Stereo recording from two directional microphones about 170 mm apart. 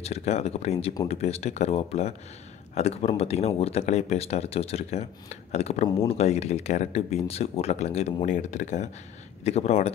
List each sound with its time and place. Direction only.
0.0 s speech: 40° left (ahead or behind)